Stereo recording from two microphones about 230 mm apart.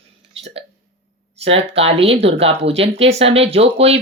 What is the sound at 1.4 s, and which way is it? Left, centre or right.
Speech, right.